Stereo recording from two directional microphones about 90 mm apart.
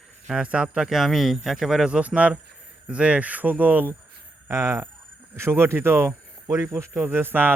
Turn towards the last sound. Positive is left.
turn(degrees=-25)  # may be behind; listen again after turning